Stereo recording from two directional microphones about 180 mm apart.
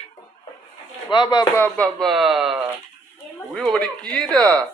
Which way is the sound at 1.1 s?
25° left (ahead or behind).